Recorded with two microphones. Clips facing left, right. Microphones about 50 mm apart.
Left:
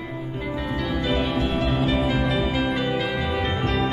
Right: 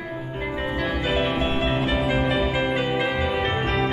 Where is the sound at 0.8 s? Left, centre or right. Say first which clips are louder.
Right 1 dB; right.